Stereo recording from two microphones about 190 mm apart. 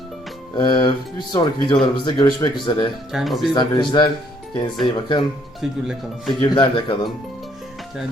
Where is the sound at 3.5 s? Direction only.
25° left (ahead or behind).